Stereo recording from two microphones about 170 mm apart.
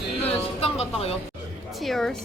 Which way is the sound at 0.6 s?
35° left (ahead or behind).